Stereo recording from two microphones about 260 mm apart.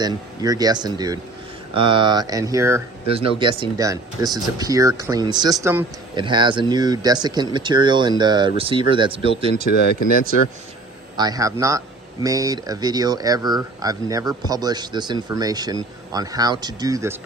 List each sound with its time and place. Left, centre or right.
0.0 s speech: centre
3.1 s speech: right
11.2 s speech: centre